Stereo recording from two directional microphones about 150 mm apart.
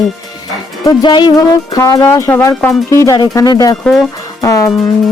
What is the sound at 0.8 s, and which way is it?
Speech, 30° left (ahead or behind).